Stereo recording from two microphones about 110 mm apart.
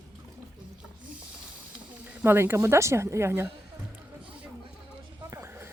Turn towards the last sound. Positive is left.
turn(degrees=-25)  # may be behind; listen again after turning